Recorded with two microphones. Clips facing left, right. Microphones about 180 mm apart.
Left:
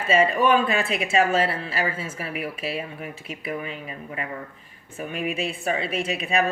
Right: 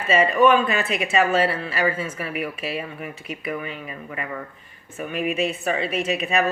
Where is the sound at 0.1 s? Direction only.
35° left (ahead or behind).